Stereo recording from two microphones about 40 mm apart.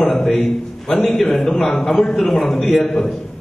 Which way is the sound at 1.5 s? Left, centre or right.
Left.